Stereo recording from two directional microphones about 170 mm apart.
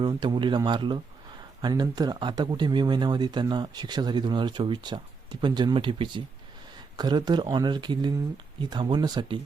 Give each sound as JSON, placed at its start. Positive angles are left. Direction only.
{"t": 0.0, "sound": "speech", "side_deg": -25}